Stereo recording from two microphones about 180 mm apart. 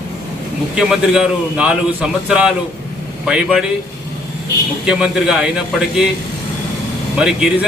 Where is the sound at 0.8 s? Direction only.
5° right (ahead or behind).